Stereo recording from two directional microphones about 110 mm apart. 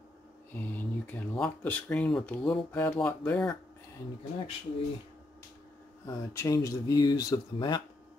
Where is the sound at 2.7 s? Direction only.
20° left (ahead or behind).